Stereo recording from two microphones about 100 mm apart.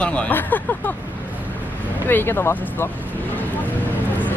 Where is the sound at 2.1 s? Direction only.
20° left (ahead or behind).